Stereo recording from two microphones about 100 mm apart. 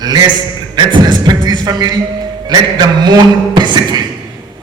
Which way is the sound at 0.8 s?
45° right (ahead or behind).